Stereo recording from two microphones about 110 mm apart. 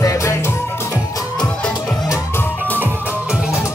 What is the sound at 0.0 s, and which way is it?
Music, 30° left (ahead or behind).